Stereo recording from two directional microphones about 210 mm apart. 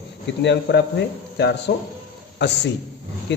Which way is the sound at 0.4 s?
55° left (ahead or behind).